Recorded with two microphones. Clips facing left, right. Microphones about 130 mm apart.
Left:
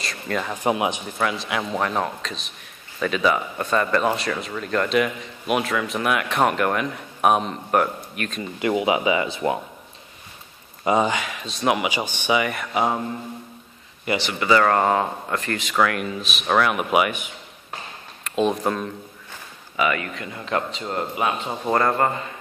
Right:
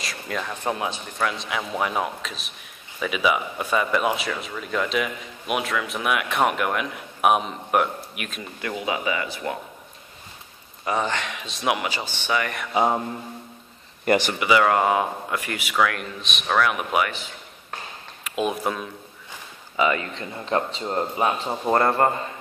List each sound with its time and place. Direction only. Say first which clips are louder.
0.0 s speech: left 3 dB; centre (ahead or behind)
0.5 s speech: left 6 dB; 15° left (ahead or behind)
1.1 s a man's voice: left 2 dB; centre (ahead or behind)
8.5 s speech: left 7 dB; 20° left (ahead or behind)
10.9 s a man's voice: left 5 dB; 15° left (ahead or behind)
11.9 s speech: left 4 dB; 15° left (ahead or behind)
12.7 s speech: right 2 dB; 20° right (ahead or behind)
14.0 s speech: right 4 dB; 50° right (ahead or behind)
14.4 s speech: left 4 dB; 10° right (ahead or behind)
15.7 s a man's voice: left 1 dB; centre (ahead or behind)
18.2 s speech: left 3 dB; 5° right (ahead or behind)
19.8 s speech: right 1 dB; 25° right (ahead or behind)